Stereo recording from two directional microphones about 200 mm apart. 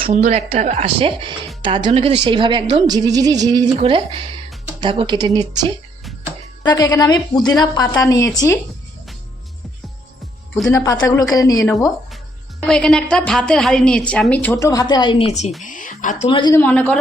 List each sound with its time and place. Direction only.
0.0 s speech: 30° right (ahead or behind)
6.6 s a woman's voice: 20° left (ahead or behind)
10.7 s speech: 15° left (ahead or behind)
12.6 s a woman's voice: 5° left (ahead or behind); by 16.1 s 40° left (ahead or behind)
16.3 s a woman's voice: 20° left (ahead or behind)
16.6 s speech: 10° left (ahead or behind)